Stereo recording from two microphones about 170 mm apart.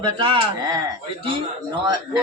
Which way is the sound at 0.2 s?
30° right (ahead or behind).